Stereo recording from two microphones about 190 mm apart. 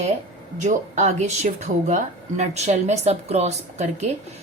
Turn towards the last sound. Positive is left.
turn(degrees=-35)  # may be behind; listen again after turning